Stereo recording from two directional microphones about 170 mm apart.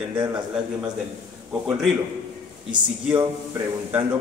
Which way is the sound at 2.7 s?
30° right (ahead or behind).